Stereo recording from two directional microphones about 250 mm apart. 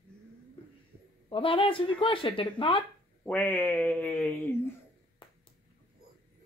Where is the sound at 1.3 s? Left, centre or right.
Left.